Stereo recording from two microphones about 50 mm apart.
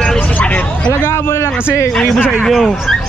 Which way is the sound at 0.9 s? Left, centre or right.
Left.